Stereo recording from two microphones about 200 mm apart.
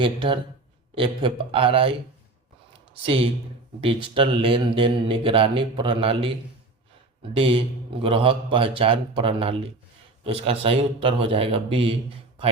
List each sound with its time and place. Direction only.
0.0 s speech: 25° right (ahead or behind)
2.9 s speech: 25° right (ahead or behind)